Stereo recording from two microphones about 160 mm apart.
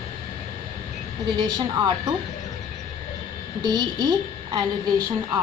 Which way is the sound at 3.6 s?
25° right (ahead or behind).